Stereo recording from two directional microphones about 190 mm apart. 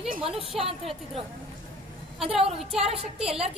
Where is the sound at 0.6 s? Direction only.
30° right (ahead or behind).